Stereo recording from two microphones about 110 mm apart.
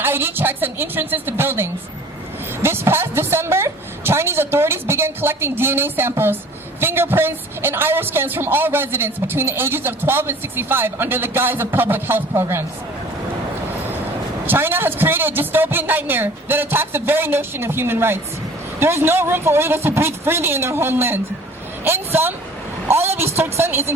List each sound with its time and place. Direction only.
0.0 s a woman's voice: 20° right (ahead or behind)
14.4 s a woman's voice: 20° right (ahead or behind)